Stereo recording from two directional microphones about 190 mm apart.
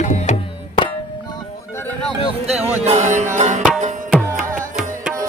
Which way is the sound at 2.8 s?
35° right (ahead or behind).